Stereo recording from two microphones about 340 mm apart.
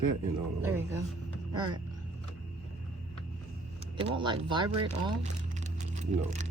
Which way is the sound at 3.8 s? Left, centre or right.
Centre.